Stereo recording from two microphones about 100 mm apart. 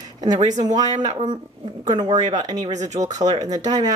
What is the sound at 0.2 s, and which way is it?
Speech, 40° right (ahead or behind).